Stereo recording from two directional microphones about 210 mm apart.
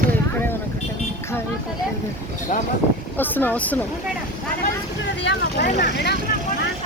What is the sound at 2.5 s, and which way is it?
Speech, 35° left (ahead or behind).